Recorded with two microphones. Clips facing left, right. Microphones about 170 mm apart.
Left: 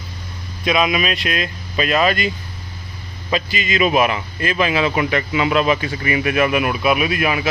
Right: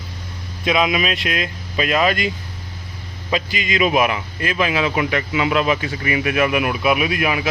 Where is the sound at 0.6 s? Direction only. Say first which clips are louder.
Even; 20° right (ahead or behind).